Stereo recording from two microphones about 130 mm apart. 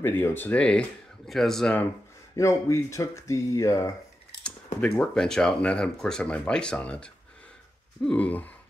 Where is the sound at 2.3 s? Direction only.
25° left (ahead or behind).